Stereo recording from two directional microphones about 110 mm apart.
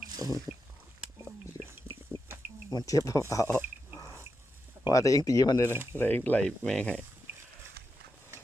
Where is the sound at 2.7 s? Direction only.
30° left (ahead or behind).